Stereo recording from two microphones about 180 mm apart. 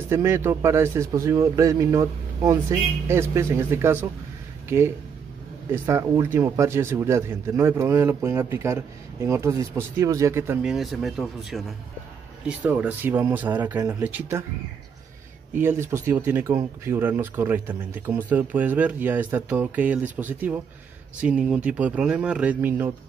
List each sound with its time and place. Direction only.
0.1 s speech: 15° right (ahead or behind)
10.6 s speech: centre (ahead or behind)
15.5 s speech: 15° right (ahead or behind)